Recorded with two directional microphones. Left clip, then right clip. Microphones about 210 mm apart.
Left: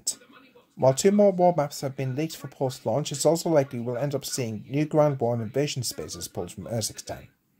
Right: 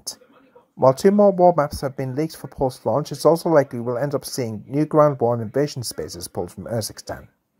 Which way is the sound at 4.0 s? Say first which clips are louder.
Right 4 dB; 20° right (ahead or behind).